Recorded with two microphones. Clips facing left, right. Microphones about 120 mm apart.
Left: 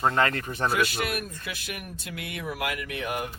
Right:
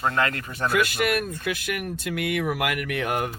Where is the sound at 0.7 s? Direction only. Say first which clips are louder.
Right 6 dB; 65° right (ahead or behind).